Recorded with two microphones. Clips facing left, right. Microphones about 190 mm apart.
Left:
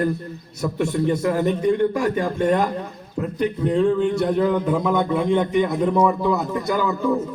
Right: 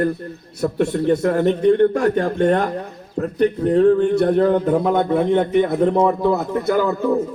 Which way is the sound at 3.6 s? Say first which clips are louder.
Right 4 dB; 50° right (ahead or behind).